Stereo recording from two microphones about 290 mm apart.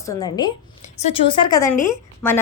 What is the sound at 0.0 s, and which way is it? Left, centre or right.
A woman's voice, centre.